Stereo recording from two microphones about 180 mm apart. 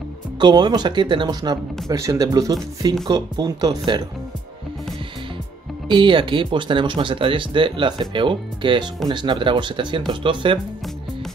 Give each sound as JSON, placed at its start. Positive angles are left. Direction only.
{"t": 0.4, "sound": "speech", "side_deg": -25}
{"t": 5.9, "sound": "speech", "side_deg": -25}